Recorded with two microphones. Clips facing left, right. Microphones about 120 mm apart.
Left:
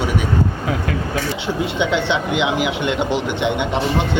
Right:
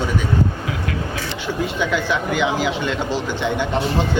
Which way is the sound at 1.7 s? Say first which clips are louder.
Left 3 dB; 25° left (ahead or behind).